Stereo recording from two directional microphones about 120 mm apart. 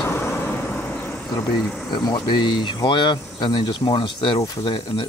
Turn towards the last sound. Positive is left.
turn(degrees=40)  # may be behind; listen again after turning